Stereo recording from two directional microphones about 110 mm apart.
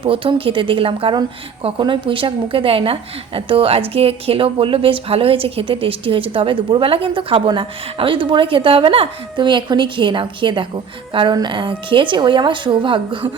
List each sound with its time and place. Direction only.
0.0 s a woman's voice: 50° right (ahead or behind)